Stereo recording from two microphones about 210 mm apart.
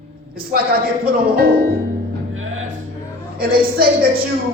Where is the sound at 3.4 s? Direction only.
45° right (ahead or behind).